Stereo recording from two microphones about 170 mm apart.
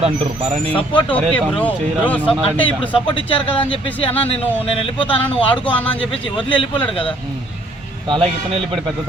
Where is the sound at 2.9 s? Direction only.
30° left (ahead or behind).